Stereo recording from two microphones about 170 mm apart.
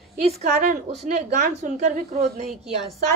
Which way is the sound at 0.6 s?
45° right (ahead or behind).